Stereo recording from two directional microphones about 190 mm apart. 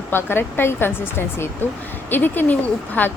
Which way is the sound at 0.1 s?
10° left (ahead or behind).